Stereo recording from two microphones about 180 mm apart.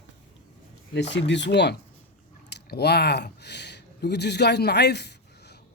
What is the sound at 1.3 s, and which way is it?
Speech, 75° left (ahead or behind).